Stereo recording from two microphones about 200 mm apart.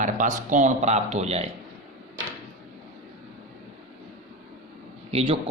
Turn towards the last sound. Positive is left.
turn(degrees=-30)  # may be behind; listen again after turning